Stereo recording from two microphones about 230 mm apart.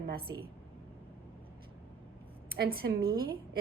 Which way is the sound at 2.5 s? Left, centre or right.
Right.